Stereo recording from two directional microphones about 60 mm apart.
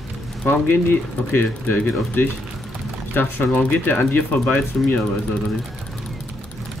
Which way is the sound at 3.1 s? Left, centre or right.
Left.